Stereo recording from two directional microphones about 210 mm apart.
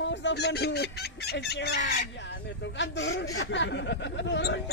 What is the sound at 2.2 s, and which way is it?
Speech, 55° left (ahead or behind).